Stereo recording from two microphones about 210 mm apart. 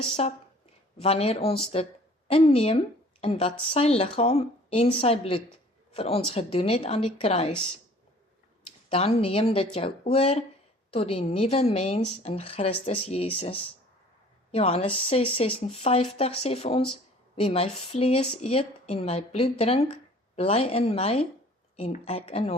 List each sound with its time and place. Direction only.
0.0 s a woman's voice: 30° left (ahead or behind)
8.9 s a woman's voice: 30° left (ahead or behind)